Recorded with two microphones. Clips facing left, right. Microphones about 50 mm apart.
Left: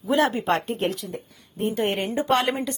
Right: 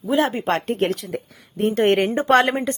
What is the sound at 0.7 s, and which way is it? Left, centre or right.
A woman's voice, right.